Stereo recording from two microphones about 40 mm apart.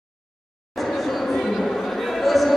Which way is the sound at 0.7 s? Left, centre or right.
Centre.